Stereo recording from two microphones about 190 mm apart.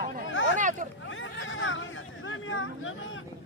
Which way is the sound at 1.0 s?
90° left.